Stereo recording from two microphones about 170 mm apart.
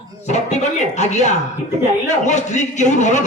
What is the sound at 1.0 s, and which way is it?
A man's voice, 45° left (ahead or behind).